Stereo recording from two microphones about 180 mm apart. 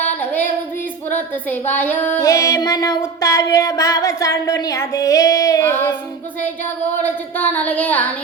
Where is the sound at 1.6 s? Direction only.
10° left (ahead or behind).